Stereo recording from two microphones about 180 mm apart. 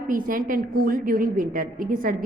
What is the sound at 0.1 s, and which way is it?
A woman's voice, 50° right (ahead or behind).